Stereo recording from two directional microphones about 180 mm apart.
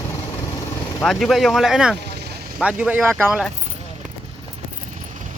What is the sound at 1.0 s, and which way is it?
Speech, centre (ahead or behind).